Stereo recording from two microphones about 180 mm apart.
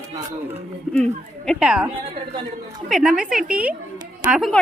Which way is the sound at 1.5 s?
5° right (ahead or behind).